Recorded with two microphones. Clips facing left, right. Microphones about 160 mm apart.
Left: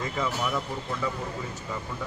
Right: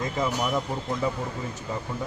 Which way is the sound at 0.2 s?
15° right (ahead or behind).